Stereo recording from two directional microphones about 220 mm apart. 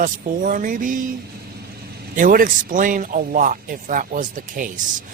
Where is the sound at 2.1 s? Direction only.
40° right (ahead or behind).